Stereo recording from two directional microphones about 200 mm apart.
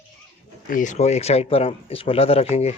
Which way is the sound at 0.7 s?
40° left (ahead or behind).